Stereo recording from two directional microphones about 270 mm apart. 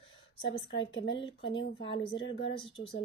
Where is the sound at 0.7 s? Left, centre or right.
Left.